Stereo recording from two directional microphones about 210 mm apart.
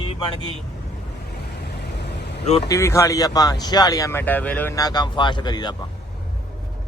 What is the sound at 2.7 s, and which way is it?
Speech, 15° left (ahead or behind).